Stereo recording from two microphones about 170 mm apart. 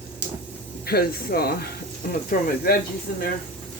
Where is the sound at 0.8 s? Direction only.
65° left (ahead or behind).